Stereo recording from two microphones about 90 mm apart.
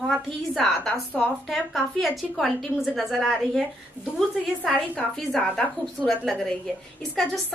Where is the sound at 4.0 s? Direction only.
20° left (ahead or behind).